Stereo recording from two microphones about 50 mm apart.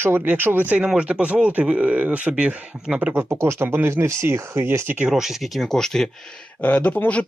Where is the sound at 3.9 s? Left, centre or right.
Right.